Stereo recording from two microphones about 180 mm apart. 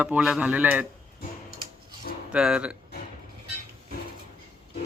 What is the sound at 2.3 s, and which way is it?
Speech, 5° right (ahead or behind).